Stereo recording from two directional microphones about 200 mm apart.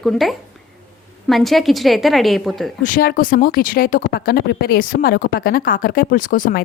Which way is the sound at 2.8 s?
45° left (ahead or behind).